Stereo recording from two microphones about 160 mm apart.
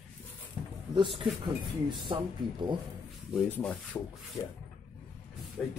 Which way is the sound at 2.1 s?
30° right (ahead or behind).